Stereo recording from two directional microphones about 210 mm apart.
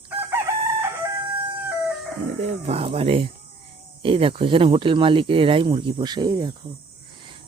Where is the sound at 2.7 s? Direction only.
30° right (ahead or behind).